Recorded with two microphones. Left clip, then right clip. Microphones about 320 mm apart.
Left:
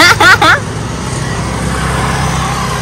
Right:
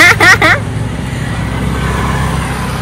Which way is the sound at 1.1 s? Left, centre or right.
Left.